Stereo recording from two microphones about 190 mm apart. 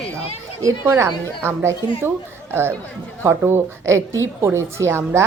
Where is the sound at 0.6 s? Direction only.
15° right (ahead or behind).